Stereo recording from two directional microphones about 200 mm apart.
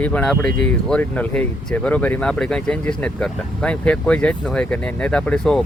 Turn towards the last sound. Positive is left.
turn(degrees=5)  # may be behind; listen again after turning